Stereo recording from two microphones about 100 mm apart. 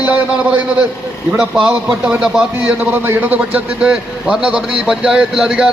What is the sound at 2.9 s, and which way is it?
A man's voice, 20° right (ahead or behind).